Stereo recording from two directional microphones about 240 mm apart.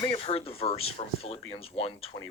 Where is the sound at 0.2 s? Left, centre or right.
Left.